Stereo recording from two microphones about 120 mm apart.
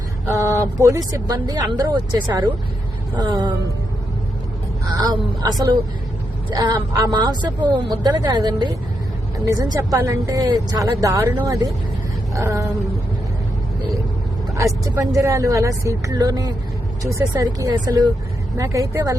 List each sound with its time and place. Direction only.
0.3 s speech: 25° right (ahead or behind)
4.9 s speech: 35° right (ahead or behind)
14.5 s speech: 25° right (ahead or behind)